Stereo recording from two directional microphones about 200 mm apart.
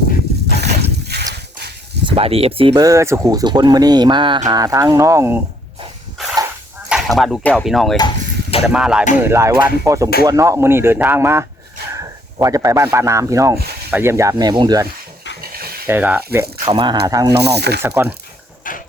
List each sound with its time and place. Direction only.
0.5 s boat: 55° right (ahead or behind)
2.0 s speech: 30° right (ahead or behind); by 5.4 s 15° right (ahead or behind)
6.8 s speech: centre (ahead or behind)
7.9 s a sound: 25° left (ahead or behind)
8.7 s music: 5° right (ahead or behind)
9.2 s speech: 15° right (ahead or behind)
15.4 s a sound: 50° right (ahead or behind)
15.9 s speech: 10° right (ahead or behind)
16.6 s speech: 25° right (ahead or behind)
17.3 s speech: 55° right (ahead or behind)
17.8 s speech: 10° right (ahead or behind)